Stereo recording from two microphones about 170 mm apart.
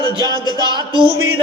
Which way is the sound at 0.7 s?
25° right (ahead or behind).